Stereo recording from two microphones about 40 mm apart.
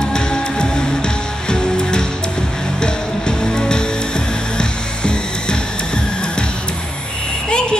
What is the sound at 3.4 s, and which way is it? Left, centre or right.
Music, left.